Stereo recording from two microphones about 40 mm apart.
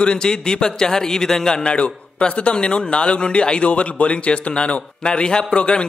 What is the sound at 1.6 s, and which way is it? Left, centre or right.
A man's voice, left.